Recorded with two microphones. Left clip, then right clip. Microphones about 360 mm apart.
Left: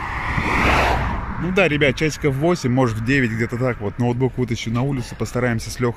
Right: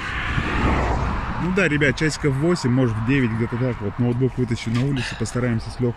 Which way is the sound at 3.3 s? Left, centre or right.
Left.